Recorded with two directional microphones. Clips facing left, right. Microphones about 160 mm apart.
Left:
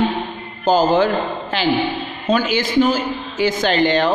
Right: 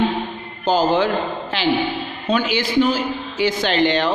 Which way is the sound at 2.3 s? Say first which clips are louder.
Left 1 dB; 45° left (ahead or behind).